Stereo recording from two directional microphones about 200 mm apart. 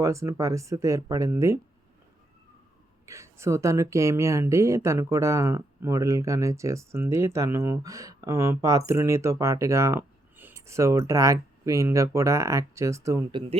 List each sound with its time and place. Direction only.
0.0 s speech: 15° right (ahead or behind)
3.1 s speech: 15° right (ahead or behind)